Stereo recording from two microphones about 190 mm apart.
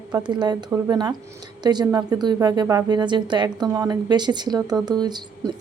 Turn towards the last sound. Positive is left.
turn(degrees=-20)  # may be behind; listen again after turning